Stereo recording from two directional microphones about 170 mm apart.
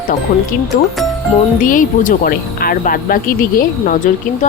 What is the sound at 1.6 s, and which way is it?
Speech, 50° left (ahead or behind).